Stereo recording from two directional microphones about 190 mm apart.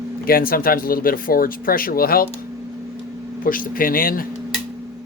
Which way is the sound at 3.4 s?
45° left (ahead or behind).